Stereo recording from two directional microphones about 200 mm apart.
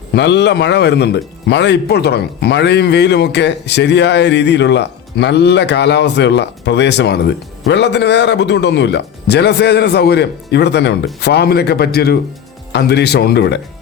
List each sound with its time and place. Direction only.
0.1 s speech: 60° left (ahead or behind)